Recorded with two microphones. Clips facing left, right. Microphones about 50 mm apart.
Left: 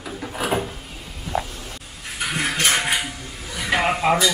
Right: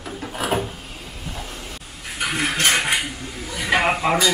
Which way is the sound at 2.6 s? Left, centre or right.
Centre.